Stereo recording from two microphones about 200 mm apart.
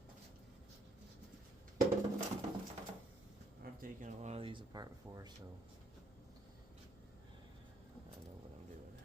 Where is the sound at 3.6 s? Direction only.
40° right (ahead or behind); by 5.3 s 20° right (ahead or behind).